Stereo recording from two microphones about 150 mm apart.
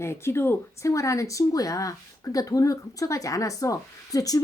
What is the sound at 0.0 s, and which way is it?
Speech, 15° left (ahead or behind).